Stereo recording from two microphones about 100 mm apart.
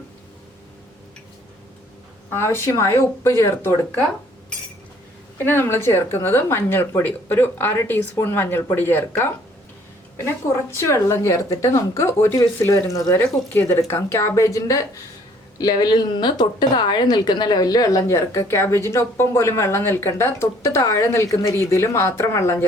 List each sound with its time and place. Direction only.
2.3 s speech: 25° left (ahead or behind)
5.5 s speech: 25° left (ahead or behind)
13.5 s speech: 20° left (ahead or behind)
15.5 s speech: 45° left (ahead or behind); by 22.6 s 25° left (ahead or behind)